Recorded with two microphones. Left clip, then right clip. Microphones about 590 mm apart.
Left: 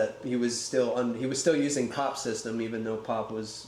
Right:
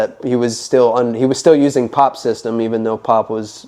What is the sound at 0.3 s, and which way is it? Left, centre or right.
Speech, right.